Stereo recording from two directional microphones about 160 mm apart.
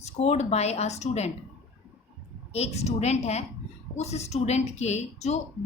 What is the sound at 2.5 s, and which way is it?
A woman's voice, 40° left (ahead or behind).